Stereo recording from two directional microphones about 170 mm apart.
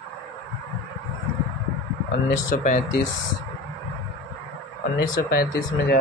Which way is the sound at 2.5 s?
60° left (ahead or behind).